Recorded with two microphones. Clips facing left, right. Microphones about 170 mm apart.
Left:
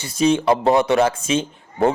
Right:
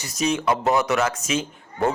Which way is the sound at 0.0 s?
30° left (ahead or behind).